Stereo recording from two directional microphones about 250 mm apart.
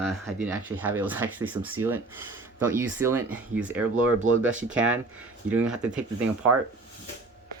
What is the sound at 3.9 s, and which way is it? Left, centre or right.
Speech, right.